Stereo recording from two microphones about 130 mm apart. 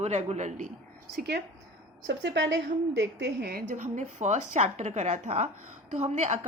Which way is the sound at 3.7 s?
75° right (ahead or behind).